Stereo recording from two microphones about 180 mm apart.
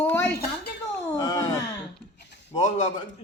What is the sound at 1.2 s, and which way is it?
Wail, 20° left (ahead or behind).